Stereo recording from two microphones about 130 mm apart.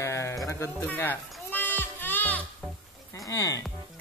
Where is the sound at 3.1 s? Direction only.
25° left (ahead or behind).